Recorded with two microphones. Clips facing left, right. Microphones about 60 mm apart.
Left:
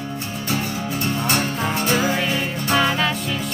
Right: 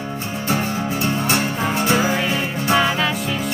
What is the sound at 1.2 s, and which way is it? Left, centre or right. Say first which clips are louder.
Music: right 2 dB; centre.